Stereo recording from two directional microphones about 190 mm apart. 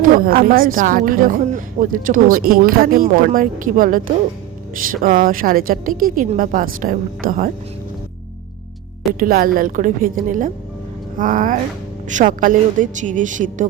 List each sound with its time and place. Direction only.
0.0 s speech: 50° right (ahead or behind)
9.1 s a woman's voice: 45° right (ahead or behind)